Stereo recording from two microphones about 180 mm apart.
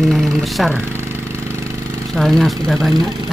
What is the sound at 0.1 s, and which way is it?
Speech, centre (ahead or behind).